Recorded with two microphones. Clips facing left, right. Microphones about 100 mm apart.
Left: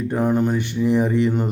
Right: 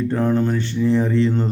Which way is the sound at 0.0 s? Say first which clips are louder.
Right 1 dB; 15° left (ahead or behind).